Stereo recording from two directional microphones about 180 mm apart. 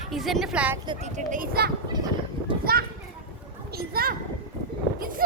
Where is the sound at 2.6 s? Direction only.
55° right (ahead or behind).